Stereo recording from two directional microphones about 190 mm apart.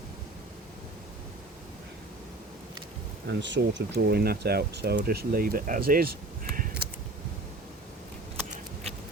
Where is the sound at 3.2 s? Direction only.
70° right (ahead or behind); by 6.7 s 50° right (ahead or behind).